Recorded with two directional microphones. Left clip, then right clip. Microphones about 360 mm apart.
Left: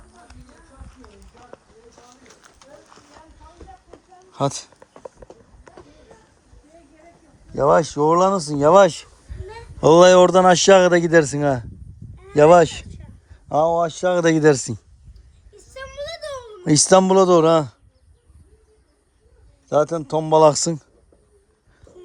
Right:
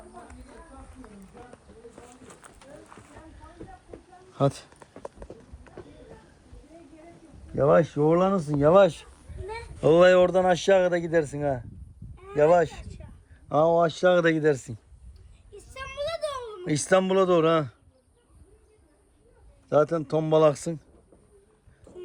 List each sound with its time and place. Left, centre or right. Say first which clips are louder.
4.4 s speech: left 3 dB; centre
7.5 s speech: left 5 dB; centre
13.5 s speech: left 3 dB; centre
16.0 s a sound: right 1 dB; centre
16.6 s speech: left 9 dB; left
19.6 s speech: left 4 dB; centre